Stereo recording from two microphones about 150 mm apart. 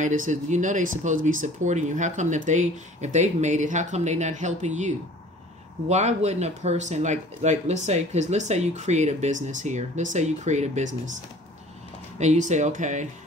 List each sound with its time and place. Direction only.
0.0 s speech: 60° right (ahead or behind)
12.2 s speech: 50° right (ahead or behind)